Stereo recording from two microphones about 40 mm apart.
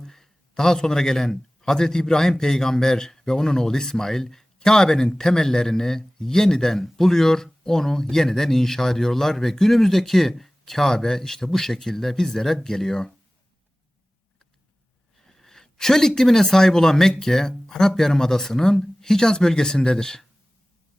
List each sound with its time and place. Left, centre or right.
0.0 s a man's voice: centre
15.3 s speech: centre